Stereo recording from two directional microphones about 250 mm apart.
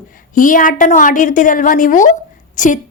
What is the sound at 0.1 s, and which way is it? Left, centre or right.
A woman's voice, left.